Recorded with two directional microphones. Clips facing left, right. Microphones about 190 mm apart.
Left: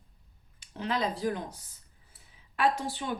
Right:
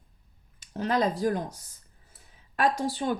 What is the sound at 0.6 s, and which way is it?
Speech, 45° right (ahead or behind).